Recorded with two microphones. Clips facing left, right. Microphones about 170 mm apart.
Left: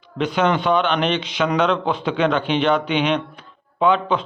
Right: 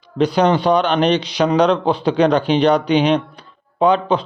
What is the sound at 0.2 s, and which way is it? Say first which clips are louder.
A man's voice: right 4 dB; 35° right (ahead or behind).